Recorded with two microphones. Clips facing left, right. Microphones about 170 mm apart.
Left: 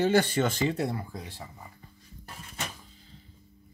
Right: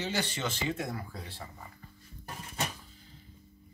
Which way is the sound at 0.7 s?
30° left (ahead or behind).